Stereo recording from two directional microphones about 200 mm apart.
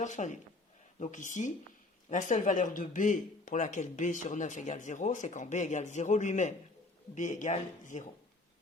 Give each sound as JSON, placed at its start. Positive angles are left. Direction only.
{"t": 0.0, "sound": "speech", "side_deg": 40}